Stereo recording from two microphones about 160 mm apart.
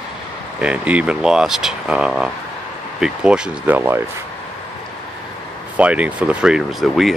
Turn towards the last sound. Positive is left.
turn(degrees=0)  # may be behind; listen again after turning